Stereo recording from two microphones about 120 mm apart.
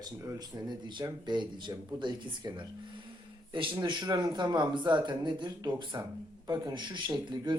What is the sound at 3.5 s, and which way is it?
A man's voice, 40° right (ahead or behind).